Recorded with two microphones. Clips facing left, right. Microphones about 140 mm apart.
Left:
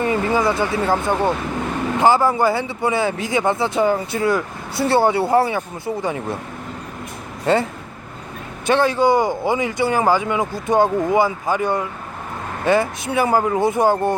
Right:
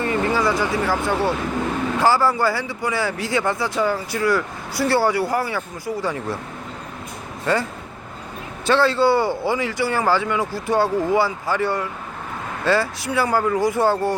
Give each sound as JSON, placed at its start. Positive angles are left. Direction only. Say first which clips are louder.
{"t": 0.0, "sound": "speech", "louder": "left 2 dB", "side_deg": 20}
{"t": 7.4, "sound": "speech", "louder": "left 4 dB", "side_deg": 25}